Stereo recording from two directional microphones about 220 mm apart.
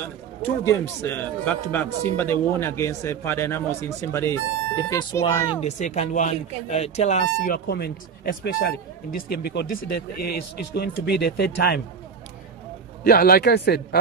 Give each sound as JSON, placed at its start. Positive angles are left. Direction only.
{"t": 0.0, "sound": "a man's voice", "side_deg": 10}
{"t": 5.6, "sound": "speech", "side_deg": 30}
{"t": 13.0, "sound": "speech", "side_deg": 45}